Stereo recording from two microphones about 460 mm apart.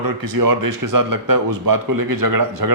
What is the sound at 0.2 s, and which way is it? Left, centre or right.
A man's voice, right.